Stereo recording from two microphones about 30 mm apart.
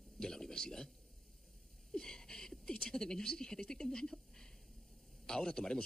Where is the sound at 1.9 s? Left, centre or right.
Left.